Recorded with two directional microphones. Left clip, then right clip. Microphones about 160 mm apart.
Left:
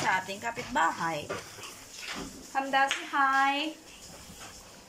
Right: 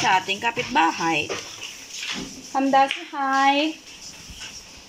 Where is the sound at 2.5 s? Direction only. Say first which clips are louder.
Right 8 dB; 30° right (ahead or behind).